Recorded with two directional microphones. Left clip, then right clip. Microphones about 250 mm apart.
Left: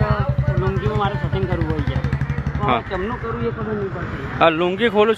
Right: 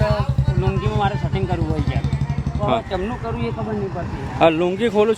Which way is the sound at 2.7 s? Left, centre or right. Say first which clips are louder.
Left 1 dB; centre.